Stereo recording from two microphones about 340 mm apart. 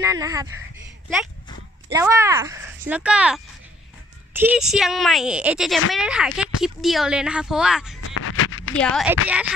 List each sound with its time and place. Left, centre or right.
0.0 s speech: centre
1.9 s speech: centre
8.0 s a sound: left
8.7 s speech: centre